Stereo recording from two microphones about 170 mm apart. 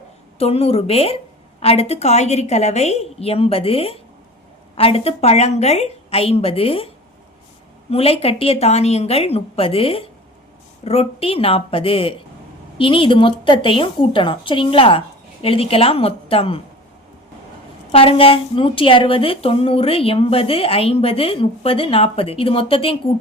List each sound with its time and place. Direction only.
0.3 s a woman's voice: 35° left (ahead or behind)
17.9 s a woman's voice: 35° left (ahead or behind)